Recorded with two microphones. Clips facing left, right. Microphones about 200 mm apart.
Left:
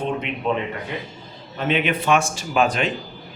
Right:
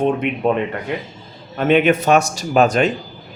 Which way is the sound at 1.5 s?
50° right (ahead or behind).